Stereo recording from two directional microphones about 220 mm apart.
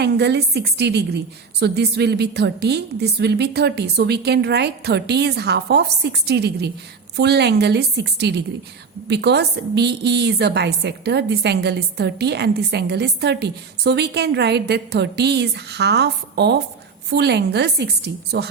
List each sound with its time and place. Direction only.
0.0 s a woman's voice: 50° right (ahead or behind)